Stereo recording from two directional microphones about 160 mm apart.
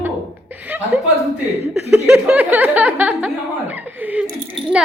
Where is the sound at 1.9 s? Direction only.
5° right (ahead or behind).